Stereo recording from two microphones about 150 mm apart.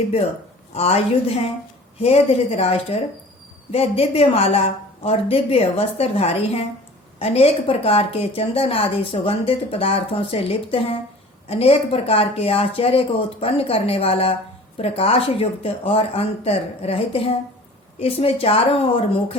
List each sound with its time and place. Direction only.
0.7 s a woman's voice: 40° left (ahead or behind)